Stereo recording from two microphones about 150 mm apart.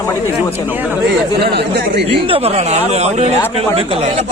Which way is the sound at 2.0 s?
40° right (ahead or behind).